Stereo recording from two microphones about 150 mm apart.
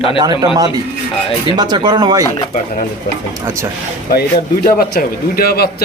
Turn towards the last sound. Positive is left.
turn(degrees=90)